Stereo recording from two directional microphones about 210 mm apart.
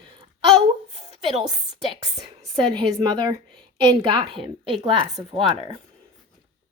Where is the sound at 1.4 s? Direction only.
20° right (ahead or behind).